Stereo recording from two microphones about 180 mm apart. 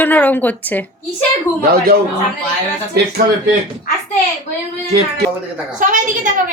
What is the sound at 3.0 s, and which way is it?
Speech, 65° right (ahead or behind).